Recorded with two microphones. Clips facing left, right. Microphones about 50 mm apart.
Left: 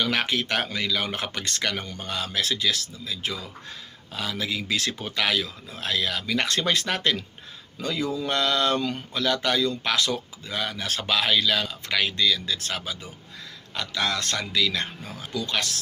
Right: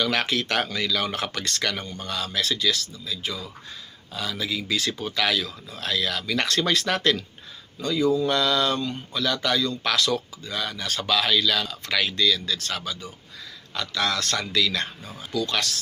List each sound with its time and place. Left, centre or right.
0.0 s speech: centre
3.1 s mantra: left
4.1 s speech: left
8.3 s mantra: left
9.1 s speech: left